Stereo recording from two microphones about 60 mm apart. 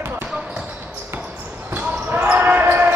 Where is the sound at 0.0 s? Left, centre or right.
Right.